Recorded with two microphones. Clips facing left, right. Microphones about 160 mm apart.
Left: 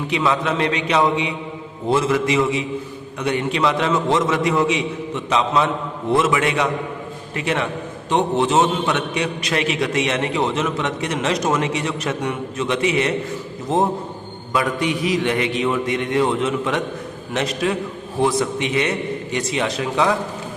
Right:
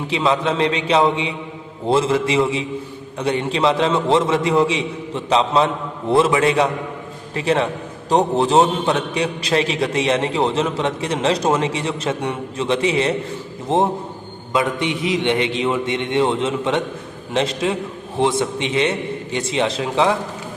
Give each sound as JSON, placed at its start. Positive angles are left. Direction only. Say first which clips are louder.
{"t": 0.1, "sound": "a man's voice", "louder": "right 2 dB", "side_deg": -30}